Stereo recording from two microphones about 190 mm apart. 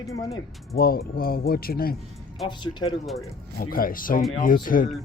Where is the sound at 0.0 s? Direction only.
15° left (ahead or behind).